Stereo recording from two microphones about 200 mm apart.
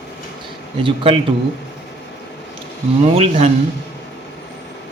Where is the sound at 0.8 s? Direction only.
25° right (ahead or behind).